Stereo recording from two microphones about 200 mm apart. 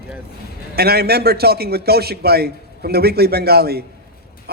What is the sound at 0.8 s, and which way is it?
A man's voice, 50° right (ahead or behind).